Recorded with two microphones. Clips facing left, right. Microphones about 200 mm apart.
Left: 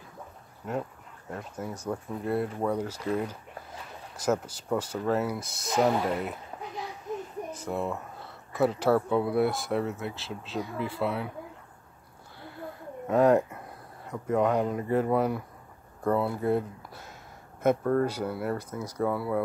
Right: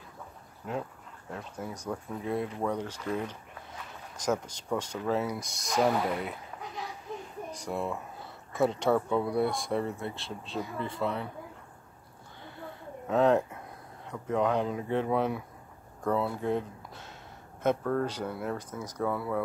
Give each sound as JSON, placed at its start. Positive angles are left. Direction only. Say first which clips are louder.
{"t": 1.3, "sound": "speech", "louder": "left 2 dB", "side_deg": 5}
{"t": 7.5, "sound": "speech", "louder": "left 1 dB", "side_deg": 5}
{"t": 13.0, "sound": "speech", "louder": "left 3 dB", "side_deg": 10}